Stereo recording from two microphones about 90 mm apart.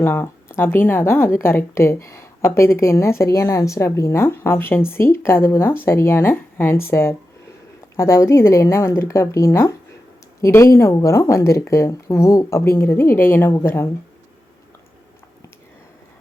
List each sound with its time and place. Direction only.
0.0 s a woman's voice: 25° left (ahead or behind)